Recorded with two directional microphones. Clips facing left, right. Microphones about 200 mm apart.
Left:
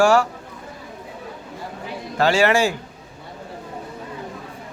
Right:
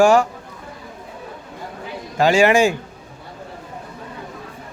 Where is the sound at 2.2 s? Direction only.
15° right (ahead or behind).